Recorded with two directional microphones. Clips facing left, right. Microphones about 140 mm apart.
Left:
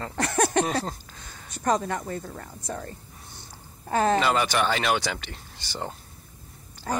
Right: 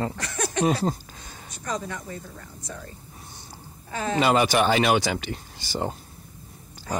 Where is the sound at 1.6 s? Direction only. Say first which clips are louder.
Left 6 dB; 55° left (ahead or behind).